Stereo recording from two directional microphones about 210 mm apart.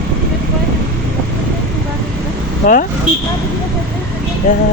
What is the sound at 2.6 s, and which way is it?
Speech, 35° left (ahead or behind).